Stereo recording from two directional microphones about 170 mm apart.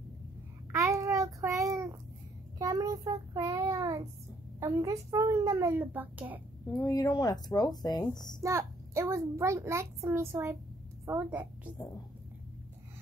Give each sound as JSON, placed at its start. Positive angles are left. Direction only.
{"t": 0.7, "sound": "child singing", "side_deg": -20}
{"t": 4.6, "sound": "a child's voice", "side_deg": -15}
{"t": 6.7, "sound": "speech", "side_deg": 20}
{"t": 8.4, "sound": "a child's voice", "side_deg": -15}